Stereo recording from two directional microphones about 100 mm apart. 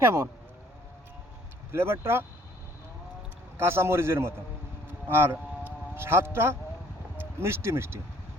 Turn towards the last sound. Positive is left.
turn(degrees=-25)  # may be behind; listen again after turning